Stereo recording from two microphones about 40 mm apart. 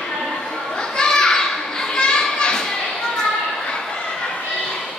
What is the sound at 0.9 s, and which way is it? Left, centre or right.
Children playing, centre.